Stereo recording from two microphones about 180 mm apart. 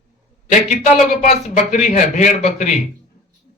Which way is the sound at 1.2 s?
40° left (ahead or behind).